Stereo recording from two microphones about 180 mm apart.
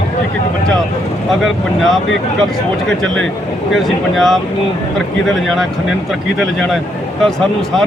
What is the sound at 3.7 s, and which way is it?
Speech, centre (ahead or behind).